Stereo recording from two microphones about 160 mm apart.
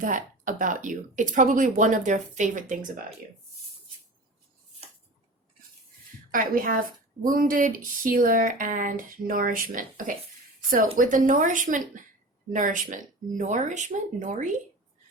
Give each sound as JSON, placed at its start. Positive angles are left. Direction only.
{"t": 0.0, "sound": "speech", "side_deg": -55}
{"t": 6.3, "sound": "speech", "side_deg": -60}